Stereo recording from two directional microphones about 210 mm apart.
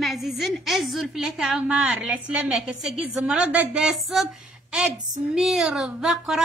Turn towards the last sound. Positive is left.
turn(degrees=0)  # may be behind; listen again after turning